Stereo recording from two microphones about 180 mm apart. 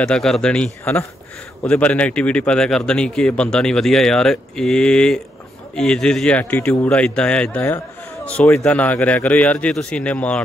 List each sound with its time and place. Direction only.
0.0 s a man's voice: 5° left (ahead or behind)